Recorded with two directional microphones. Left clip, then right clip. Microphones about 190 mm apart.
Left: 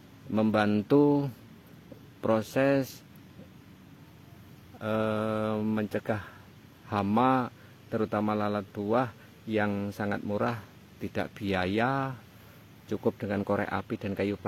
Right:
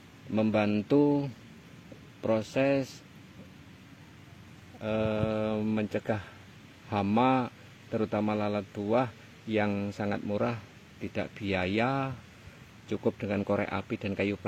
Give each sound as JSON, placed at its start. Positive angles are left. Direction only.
{"t": 0.3, "sound": "a man's voice", "side_deg": 10}
{"t": 4.7, "sound": "a man's voice", "side_deg": 15}